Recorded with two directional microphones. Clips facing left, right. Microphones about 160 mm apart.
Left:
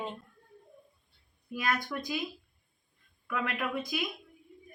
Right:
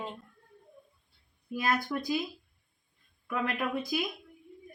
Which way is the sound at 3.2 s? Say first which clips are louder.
Right 2 dB; 35° right (ahead or behind).